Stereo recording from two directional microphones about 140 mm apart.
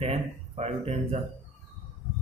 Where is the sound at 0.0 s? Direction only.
50° right (ahead or behind).